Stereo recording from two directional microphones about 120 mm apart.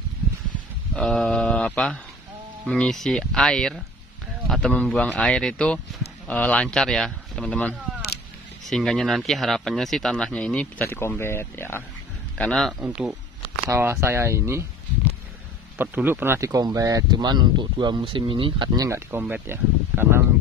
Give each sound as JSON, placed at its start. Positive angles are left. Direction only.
{"t": 0.9, "sound": "a sound", "side_deg": 5}
{"t": 2.7, "sound": "speech", "side_deg": 5}
{"t": 12.4, "sound": "speech", "side_deg": 5}
{"t": 12.8, "sound": "speech", "side_deg": -10}
{"t": 13.7, "sound": "speech", "side_deg": -20}
{"t": 15.8, "sound": "speech", "side_deg": -15}
{"t": 18.8, "sound": "speech", "side_deg": -20}